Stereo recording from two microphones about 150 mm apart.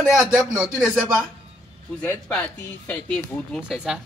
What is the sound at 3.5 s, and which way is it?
Speech, centre (ahead or behind).